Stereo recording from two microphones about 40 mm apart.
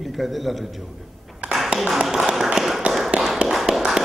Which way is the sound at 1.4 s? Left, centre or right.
Right.